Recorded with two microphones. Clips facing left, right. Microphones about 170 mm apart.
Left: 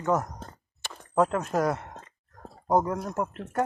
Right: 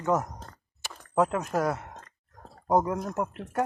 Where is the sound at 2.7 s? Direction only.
5° right (ahead or behind).